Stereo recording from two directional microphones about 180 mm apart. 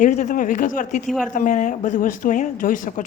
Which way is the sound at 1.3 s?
45° left (ahead or behind).